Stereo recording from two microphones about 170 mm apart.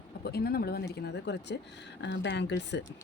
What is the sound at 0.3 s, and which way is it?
Speech, 70° left (ahead or behind).